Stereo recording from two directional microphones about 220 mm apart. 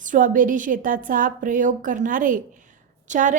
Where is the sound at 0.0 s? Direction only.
35° right (ahead or behind).